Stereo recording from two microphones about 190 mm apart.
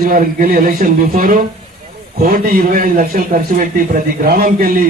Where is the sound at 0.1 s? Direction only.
50° right (ahead or behind).